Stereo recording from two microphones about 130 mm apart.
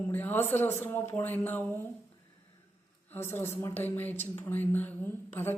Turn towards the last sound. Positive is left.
turn(degrees=15)  # may be behind; listen again after turning